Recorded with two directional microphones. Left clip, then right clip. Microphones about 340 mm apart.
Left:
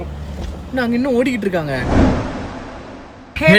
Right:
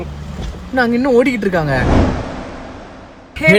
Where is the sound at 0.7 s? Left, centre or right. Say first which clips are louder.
Right 5 dB; centre.